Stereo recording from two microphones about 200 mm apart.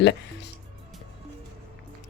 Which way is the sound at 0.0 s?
60° left (ahead or behind).